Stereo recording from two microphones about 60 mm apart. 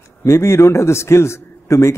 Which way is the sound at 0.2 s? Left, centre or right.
Left.